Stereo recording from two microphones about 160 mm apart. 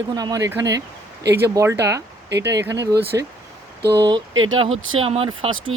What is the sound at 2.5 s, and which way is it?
Speech, 20° right (ahead or behind).